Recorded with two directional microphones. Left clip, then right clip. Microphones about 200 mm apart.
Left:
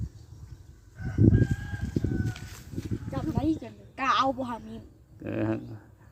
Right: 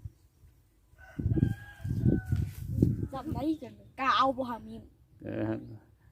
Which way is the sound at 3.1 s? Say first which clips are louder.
Left 4 dB; 30° right (ahead or behind).